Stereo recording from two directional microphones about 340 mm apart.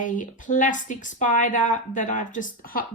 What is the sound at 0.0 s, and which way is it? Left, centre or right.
Speech, left.